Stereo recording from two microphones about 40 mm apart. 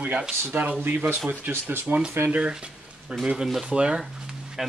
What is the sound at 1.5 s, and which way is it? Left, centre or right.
Speech, right.